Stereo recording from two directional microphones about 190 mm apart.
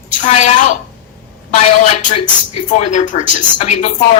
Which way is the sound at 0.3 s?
40° left (ahead or behind).